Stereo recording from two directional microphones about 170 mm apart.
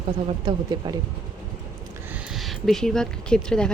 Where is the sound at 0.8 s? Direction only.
25° right (ahead or behind).